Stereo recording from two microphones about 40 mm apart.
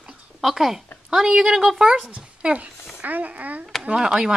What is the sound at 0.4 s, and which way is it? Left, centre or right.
A woman's voice, centre.